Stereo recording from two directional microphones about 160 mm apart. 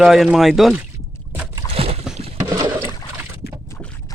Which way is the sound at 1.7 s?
35° right (ahead or behind).